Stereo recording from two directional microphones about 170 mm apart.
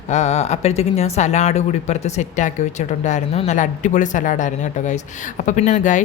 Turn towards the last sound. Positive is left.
turn(degrees=45)  # may be behind; listen again after turning